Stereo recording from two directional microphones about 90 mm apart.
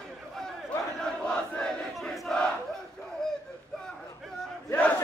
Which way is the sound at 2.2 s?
10° left (ahead or behind).